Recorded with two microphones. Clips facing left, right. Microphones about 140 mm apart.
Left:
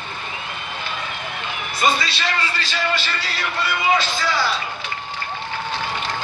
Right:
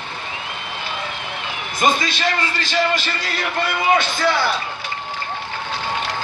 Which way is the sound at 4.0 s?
60° right (ahead or behind).